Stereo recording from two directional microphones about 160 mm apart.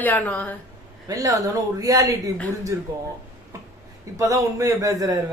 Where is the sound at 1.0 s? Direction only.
20° right (ahead or behind).